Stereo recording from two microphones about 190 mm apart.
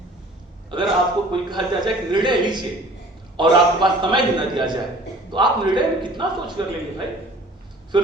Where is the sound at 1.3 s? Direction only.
25° right (ahead or behind).